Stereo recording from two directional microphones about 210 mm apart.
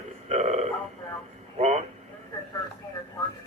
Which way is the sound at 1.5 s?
30° right (ahead or behind).